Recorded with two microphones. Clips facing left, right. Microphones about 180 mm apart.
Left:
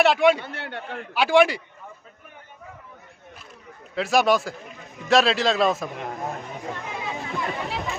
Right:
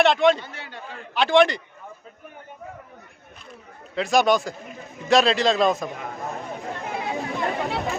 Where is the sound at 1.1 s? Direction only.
5° left (ahead or behind).